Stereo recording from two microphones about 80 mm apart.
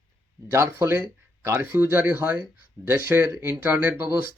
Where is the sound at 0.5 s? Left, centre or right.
Right.